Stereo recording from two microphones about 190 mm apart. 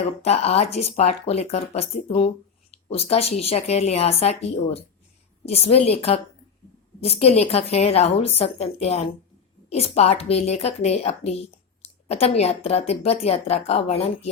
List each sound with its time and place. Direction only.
0.2 s a woman's voice: 35° left (ahead or behind)